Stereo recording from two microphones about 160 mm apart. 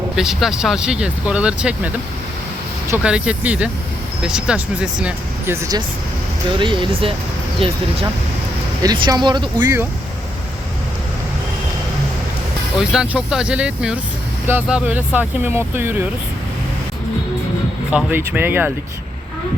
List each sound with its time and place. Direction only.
0.2 s speech: centre (ahead or behind)
2.9 s speech: 5° right (ahead or behind)
6.6 s speech: 30° right (ahead or behind)
8.8 s speech: 25° right (ahead or behind)
12.9 s speech: 5° right (ahead or behind)
17.9 s speech: 10° right (ahead or behind)